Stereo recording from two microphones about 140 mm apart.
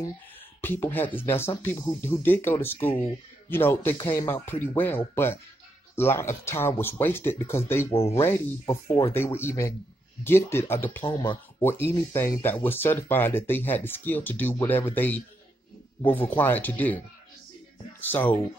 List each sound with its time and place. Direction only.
0.6 s speech: 15° left (ahead or behind)
7.9 s speech: 45° left (ahead or behind)
8.2 s speech: 20° left (ahead or behind)
11.1 s speech: 35° left (ahead or behind)
11.6 s speech: 15° left (ahead or behind)
18.0 s speech: 15° left (ahead or behind)